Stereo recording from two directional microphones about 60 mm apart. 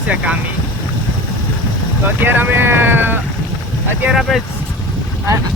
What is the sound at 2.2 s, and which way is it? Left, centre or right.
Speech, right.